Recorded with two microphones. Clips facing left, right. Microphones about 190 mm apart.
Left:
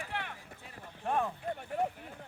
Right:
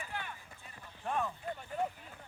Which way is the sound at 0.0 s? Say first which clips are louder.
Left 3 dB; 80° left.